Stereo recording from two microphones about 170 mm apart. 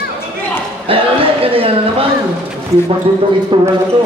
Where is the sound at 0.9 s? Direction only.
30° right (ahead or behind).